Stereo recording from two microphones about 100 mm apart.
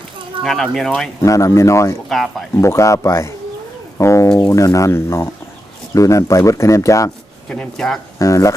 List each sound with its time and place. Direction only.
0.4 s speech: centre (ahead or behind)
1.2 s speech: 30° left (ahead or behind)
2.0 s speech: centre (ahead or behind)
2.6 s speech: 30° left (ahead or behind)
7.5 s speech: 5° left (ahead or behind)
8.2 s speech: 30° left (ahead or behind)